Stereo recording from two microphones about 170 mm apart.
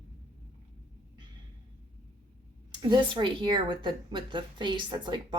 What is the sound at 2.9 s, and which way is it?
A woman's voice, 30° right (ahead or behind).